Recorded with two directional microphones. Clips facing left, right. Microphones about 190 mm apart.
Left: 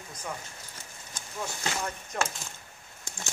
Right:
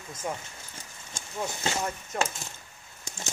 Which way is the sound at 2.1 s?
Centre (ahead or behind).